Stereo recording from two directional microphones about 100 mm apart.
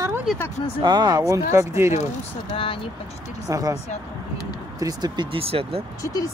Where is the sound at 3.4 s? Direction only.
35° right (ahead or behind).